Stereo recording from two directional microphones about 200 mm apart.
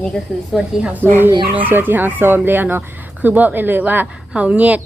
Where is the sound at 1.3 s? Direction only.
25° right (ahead or behind).